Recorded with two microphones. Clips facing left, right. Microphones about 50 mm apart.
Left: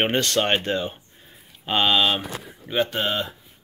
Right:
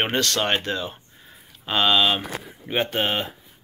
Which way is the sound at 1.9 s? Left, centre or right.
Centre.